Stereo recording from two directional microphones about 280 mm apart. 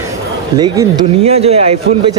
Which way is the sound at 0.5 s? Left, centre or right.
Centre.